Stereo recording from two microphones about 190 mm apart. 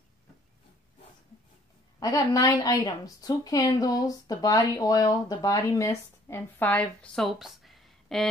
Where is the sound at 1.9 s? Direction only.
20° left (ahead or behind).